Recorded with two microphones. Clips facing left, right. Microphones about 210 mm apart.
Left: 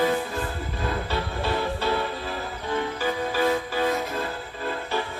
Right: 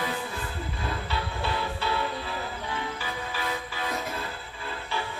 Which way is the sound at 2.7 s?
45° left (ahead or behind).